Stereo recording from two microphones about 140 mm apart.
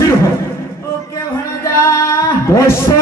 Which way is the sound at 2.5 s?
20° left (ahead or behind).